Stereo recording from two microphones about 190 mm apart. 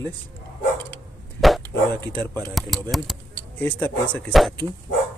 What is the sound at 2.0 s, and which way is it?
Speech, 25° right (ahead or behind).